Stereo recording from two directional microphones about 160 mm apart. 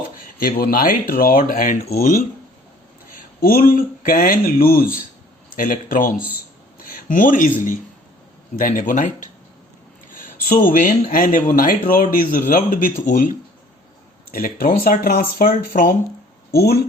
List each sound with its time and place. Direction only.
0.4 s speech: 65° left (ahead or behind)
3.2 s speech: 60° left (ahead or behind)
6.7 s a sound: 60° left (ahead or behind)
8.5 s speech: 55° left (ahead or behind)
16.5 s speech: 75° left (ahead or behind)